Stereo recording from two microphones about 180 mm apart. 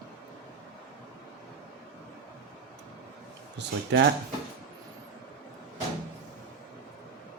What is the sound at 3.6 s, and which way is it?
Speech, 80° right.